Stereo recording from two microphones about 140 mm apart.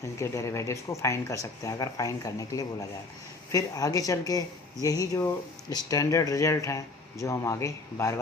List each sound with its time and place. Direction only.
0.0 s speech: 20° left (ahead or behind)